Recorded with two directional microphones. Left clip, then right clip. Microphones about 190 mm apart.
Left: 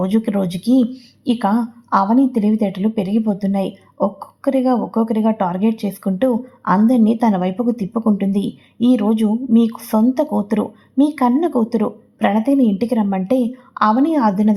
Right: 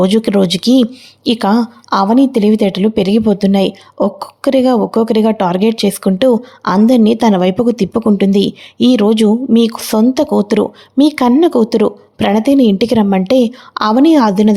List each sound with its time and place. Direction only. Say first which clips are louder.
0.0 s speech: right 8 dB; 35° right (ahead or behind)